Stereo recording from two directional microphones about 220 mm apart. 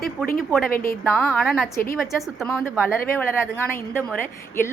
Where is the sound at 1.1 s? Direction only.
Centre (ahead or behind).